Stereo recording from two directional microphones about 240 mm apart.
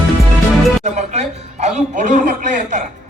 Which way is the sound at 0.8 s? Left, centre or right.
Right.